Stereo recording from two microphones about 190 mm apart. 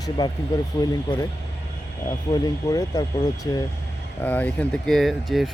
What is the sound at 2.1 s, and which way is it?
Speech, 20° left (ahead or behind).